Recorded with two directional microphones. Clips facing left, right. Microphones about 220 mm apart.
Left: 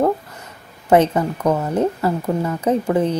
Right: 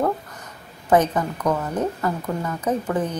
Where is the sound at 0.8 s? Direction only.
25° left (ahead or behind).